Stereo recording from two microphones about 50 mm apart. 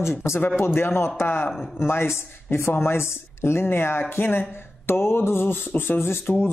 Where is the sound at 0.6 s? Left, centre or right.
Left.